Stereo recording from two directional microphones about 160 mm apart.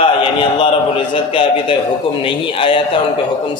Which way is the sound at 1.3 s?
35° left (ahead or behind).